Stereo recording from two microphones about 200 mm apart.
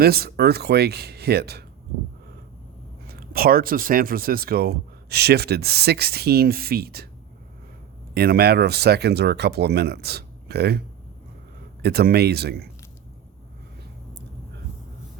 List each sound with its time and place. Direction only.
0.0 s speech: 50° right (ahead or behind)
3.1 s speech: 50° right (ahead or behind)
8.1 s speech: 50° right (ahead or behind)
11.8 s speech: 50° right (ahead or behind)